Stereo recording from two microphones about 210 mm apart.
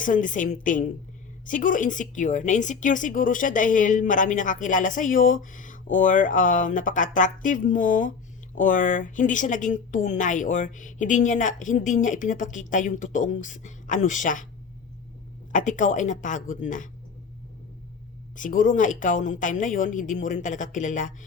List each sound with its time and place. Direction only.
0.0 s a woman's voice: 40° left (ahead or behind)
15.5 s a woman's voice: 35° left (ahead or behind)
18.3 s a woman's voice: 40° left (ahead or behind)